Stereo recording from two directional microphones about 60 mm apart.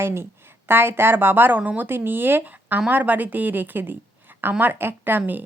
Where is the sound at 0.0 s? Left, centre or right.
Right.